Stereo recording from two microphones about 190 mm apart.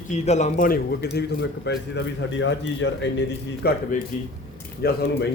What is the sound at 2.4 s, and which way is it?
Speech, 80° left.